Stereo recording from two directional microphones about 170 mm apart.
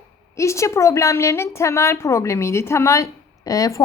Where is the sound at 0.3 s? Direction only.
15° left (ahead or behind).